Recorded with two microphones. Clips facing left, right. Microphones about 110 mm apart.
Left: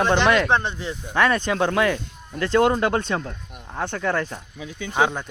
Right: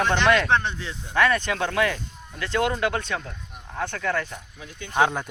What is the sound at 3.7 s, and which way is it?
Speech, 20° left (ahead or behind).